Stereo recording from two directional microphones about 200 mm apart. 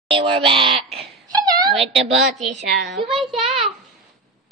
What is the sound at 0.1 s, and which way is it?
Speech, 25° right (ahead or behind).